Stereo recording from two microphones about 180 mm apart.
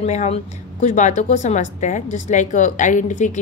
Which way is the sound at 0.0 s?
40° left (ahead or behind).